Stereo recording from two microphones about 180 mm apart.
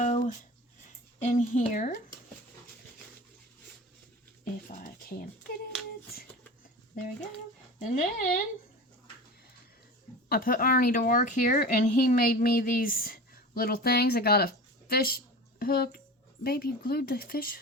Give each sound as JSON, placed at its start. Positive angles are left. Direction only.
{"t": 0.0, "sound": "a sound", "side_deg": 45}
{"t": 1.2, "sound": "speech", "side_deg": 40}
{"t": 4.7, "sound": "speech", "side_deg": 50}
{"t": 6.9, "sound": "speech", "side_deg": 50}
{"t": 10.2, "sound": "speech", "side_deg": 55}